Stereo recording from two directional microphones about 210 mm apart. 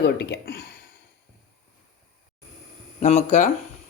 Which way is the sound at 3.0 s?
35° left (ahead or behind).